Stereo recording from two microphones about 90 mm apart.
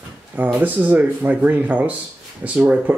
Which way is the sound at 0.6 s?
20° right (ahead or behind).